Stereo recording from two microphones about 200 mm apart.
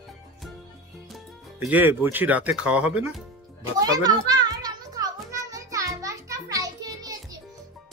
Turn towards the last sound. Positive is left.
turn(degrees=-20)  # may be behind; listen again after turning